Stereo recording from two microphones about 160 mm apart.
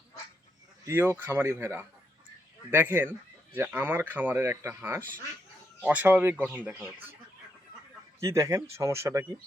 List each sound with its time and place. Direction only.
0.9 s speech: 15° right (ahead or behind)
8.2 s speech: 20° right (ahead or behind)